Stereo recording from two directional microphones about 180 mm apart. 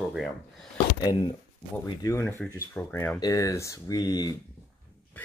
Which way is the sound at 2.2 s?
5° left (ahead or behind).